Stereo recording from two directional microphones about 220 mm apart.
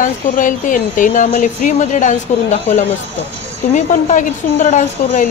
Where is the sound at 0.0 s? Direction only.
35° left (ahead or behind).